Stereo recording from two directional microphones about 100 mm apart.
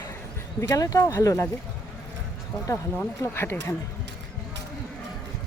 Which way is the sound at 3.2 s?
25° left (ahead or behind).